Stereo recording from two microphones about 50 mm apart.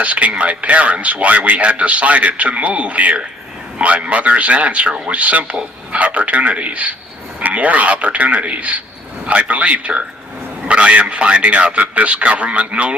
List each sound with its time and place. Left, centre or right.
0.0 s a man's voice: right